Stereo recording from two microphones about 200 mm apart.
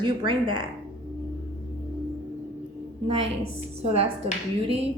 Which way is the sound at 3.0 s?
30° right (ahead or behind).